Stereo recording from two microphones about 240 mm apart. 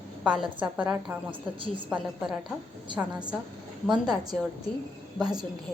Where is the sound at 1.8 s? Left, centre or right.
Centre.